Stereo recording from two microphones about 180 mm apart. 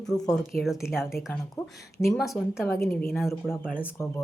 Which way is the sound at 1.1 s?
15° left (ahead or behind).